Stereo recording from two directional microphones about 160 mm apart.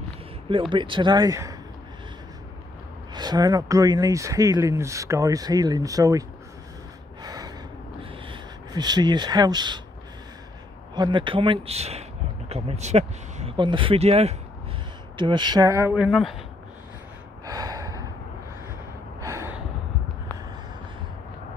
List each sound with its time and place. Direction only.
0.5 s speech: 30° right (ahead or behind)
3.2 s speech: 25° right (ahead or behind)
7.2 s gasp: 25° right (ahead or behind)
8.0 s a sound: 30° right (ahead or behind)
11.0 s speech: 30° right (ahead or behind)
13.6 s speech: 30° right (ahead or behind)
15.1 s speech: 30° right (ahead or behind); by 16.1 s 15° right (ahead or behind)
16.1 s speech: centre (ahead or behind)
17.5 s gasp: 25° right (ahead or behind)
19.2 s gasp: 20° right (ahead or behind)